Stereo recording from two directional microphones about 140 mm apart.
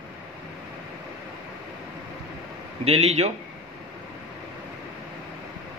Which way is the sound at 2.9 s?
50° right (ahead or behind).